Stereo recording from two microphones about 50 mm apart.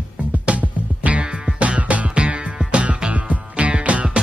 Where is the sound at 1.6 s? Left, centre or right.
Right.